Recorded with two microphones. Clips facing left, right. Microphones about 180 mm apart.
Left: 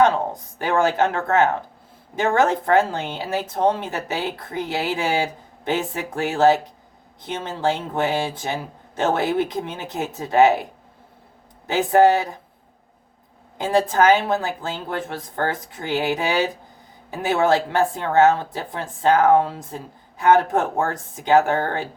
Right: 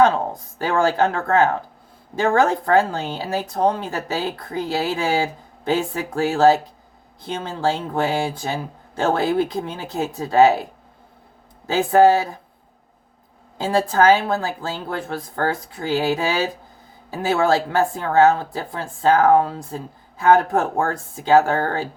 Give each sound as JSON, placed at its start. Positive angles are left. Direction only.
{"t": 0.0, "sound": "speech", "side_deg": 20}
{"t": 11.7, "sound": "speech", "side_deg": 20}
{"t": 13.6, "sound": "speech", "side_deg": 20}